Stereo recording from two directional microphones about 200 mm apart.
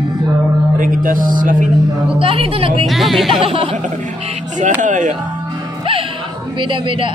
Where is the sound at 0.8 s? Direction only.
40° right (ahead or behind).